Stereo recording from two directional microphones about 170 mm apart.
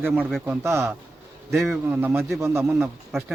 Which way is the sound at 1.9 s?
10° right (ahead or behind).